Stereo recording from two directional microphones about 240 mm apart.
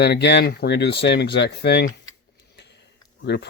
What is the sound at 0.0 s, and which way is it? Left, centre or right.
Speech, left.